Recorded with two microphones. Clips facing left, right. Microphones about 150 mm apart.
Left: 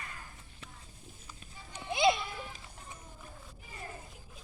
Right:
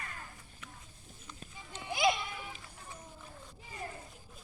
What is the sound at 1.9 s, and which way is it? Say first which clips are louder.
Music: left 3 dB; 25° left (ahead or behind).